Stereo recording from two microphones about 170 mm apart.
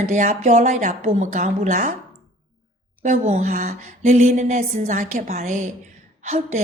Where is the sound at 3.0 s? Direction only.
45° right (ahead or behind).